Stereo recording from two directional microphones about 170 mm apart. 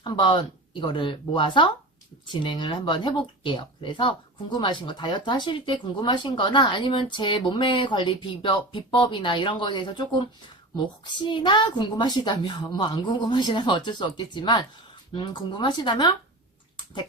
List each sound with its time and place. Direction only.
0.0 s speech: 30° left (ahead or behind)
16.7 s bathtub: 25° left (ahead or behind)